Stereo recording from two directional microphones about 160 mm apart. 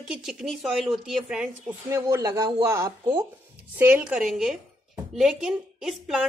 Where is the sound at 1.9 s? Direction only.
15° right (ahead or behind); by 6.2 s centre (ahead or behind).